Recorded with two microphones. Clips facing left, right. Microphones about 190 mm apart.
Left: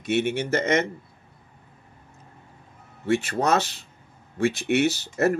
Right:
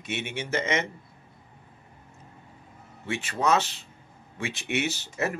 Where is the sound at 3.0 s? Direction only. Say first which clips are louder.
Left 4 dB; 45° left (ahead or behind).